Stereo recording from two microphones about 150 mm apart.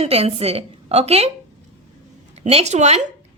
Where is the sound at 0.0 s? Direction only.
45° right (ahead or behind).